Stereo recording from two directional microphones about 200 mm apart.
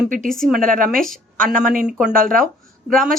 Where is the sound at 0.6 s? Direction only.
40° right (ahead or behind).